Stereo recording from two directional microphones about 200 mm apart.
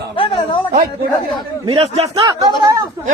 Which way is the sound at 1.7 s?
30° right (ahead or behind).